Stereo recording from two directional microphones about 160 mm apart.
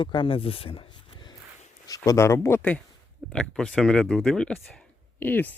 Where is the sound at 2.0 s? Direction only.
20° left (ahead or behind).